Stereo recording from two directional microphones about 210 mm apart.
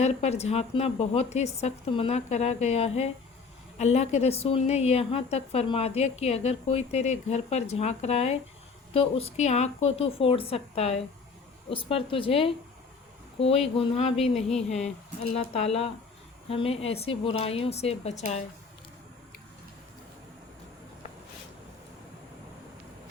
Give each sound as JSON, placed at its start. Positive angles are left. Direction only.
{"t": 0.0, "sound": "a woman's voice", "side_deg": 30}